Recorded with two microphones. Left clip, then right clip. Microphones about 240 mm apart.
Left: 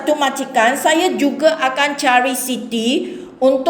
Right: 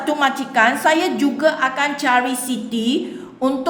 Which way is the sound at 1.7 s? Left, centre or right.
Right.